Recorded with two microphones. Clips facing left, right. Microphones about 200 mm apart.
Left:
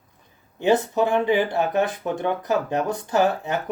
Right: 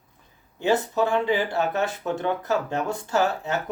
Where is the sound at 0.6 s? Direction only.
20° left (ahead or behind).